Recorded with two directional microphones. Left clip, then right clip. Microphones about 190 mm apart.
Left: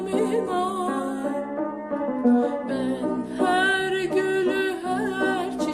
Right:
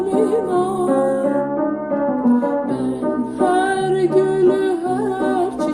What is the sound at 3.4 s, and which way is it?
Music, 30° left (ahead or behind).